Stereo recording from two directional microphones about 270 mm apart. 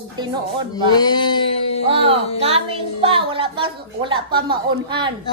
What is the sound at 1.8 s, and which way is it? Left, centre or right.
A child's voice, right.